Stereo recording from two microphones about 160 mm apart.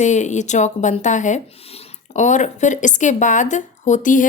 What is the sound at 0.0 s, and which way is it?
Speech, 45° left (ahead or behind).